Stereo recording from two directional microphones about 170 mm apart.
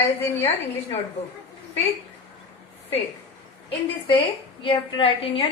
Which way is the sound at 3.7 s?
30° left (ahead or behind).